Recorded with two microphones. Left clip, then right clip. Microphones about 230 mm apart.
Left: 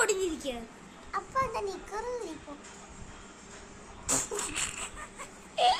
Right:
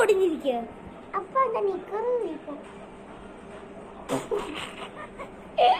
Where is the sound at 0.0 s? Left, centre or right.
Left.